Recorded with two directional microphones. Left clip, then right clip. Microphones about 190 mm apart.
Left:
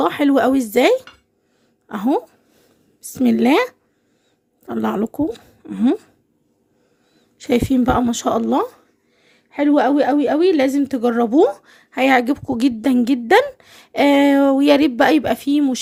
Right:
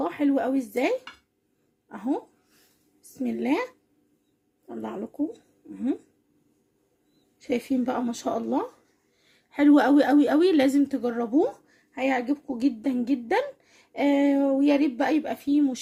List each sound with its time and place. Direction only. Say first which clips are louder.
0.0 s a woman's voice: left 10 dB; 50° left (ahead or behind)
7.4 s speech: left 10 dB; 45° left (ahead or behind)
9.2 s a woman's voice: left 3 dB; 20° left (ahead or behind); by 15.8 s 40° left (ahead or behind)